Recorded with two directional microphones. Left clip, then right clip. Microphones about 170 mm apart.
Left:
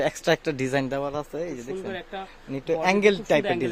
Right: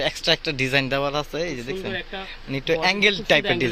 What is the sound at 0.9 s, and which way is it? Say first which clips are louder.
Speech: right 5 dB; 10° left (ahead or behind).